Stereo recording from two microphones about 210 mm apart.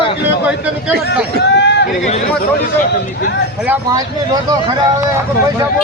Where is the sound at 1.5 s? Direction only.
55° left (ahead or behind).